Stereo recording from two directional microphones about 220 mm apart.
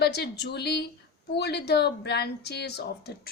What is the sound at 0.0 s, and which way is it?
Speech, 50° left (ahead or behind).